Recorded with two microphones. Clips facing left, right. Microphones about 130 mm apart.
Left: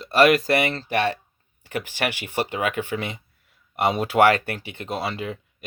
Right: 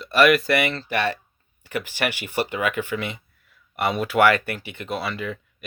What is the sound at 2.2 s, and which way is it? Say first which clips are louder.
Speech: right 1 dB; 30° left (ahead or behind).